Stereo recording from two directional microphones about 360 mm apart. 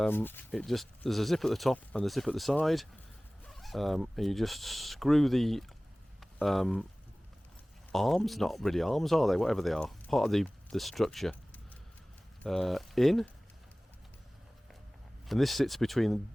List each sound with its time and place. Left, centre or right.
0.0 s speech: centre
7.9 s speech: centre
15.3 s speech: centre